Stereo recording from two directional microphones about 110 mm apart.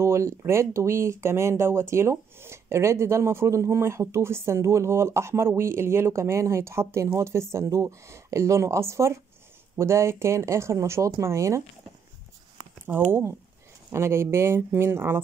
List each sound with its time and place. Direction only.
0.0 s speech: 25° right (ahead or behind)
12.8 s speech: 20° right (ahead or behind)